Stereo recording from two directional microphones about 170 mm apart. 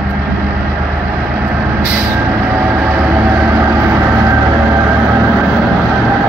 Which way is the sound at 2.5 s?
10° right (ahead or behind).